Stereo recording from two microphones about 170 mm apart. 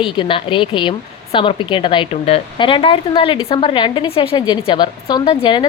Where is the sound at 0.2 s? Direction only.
30° left (ahead or behind).